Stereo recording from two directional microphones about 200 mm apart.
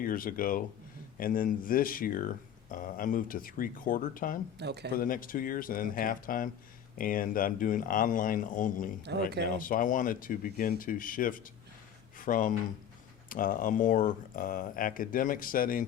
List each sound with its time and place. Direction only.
0.0 s speech: 45° left (ahead or behind)
4.5 s speech: 55° right (ahead or behind)
4.9 s speech: 45° left (ahead or behind)
9.1 s speech: 60° right (ahead or behind)
9.6 s speech: 45° left (ahead or behind)